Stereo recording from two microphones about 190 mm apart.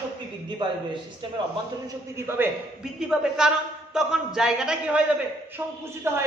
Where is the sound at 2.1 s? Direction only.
10° right (ahead or behind).